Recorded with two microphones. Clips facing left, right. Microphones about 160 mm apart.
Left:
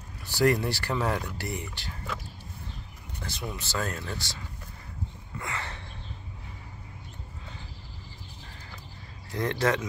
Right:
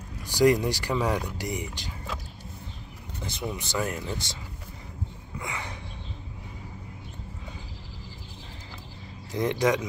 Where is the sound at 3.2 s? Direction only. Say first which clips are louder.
Right 3 dB; 20° right (ahead or behind).